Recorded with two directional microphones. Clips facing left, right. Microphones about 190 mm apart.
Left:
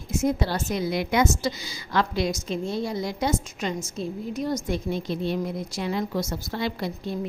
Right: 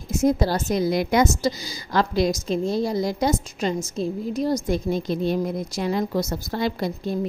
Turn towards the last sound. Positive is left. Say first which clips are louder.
# right 4 dB
turn(degrees=-40)  # may be behind; listen again after turning